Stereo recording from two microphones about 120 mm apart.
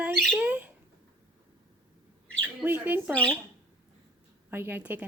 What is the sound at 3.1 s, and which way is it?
Speech, 10° left (ahead or behind).